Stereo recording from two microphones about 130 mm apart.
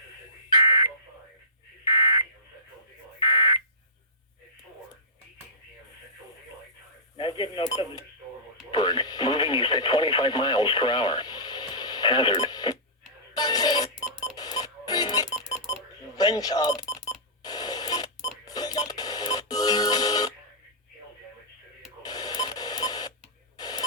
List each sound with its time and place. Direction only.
0.5 s alarm: 35° left (ahead or behind)
7.2 s speech: 35° left (ahead or behind)
13.3 s music: 35° left (ahead or behind)
16.1 s speech: 30° left (ahead or behind)
16.9 s cash register: 30° left (ahead or behind)
18.4 s music: 30° left (ahead or behind)
22.0 s radio: 30° left (ahead or behind)
23.6 s a sound: 30° left (ahead or behind)